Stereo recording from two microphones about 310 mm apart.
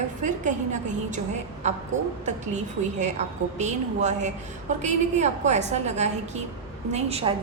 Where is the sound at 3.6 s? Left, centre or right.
Right.